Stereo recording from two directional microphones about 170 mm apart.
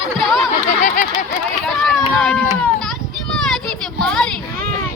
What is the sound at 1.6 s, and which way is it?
Run, 5° left (ahead or behind).